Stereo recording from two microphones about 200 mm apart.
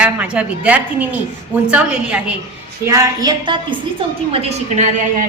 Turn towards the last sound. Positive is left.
turn(degrees=-35)  # may be behind; listen again after turning